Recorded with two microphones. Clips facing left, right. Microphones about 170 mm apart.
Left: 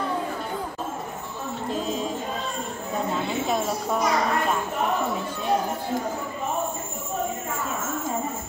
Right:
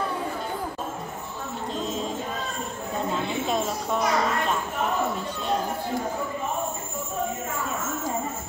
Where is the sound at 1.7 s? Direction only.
5° left (ahead or behind).